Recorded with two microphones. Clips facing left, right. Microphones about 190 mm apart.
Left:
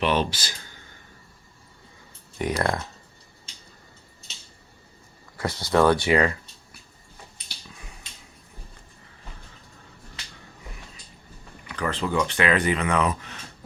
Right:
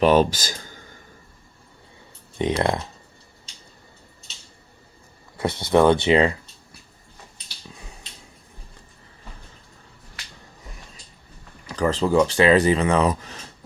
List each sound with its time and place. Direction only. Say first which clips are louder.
0.0 s speech: right 7 dB; 45° right (ahead or behind)
2.4 s speech: right 3 dB; 25° right (ahead or behind)
5.4 s speech: right 3 dB; 25° right (ahead or behind)
11.7 s speech: right 7 dB; 35° right (ahead or behind)